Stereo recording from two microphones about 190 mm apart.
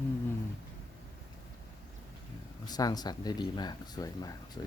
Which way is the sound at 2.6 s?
20° left (ahead or behind).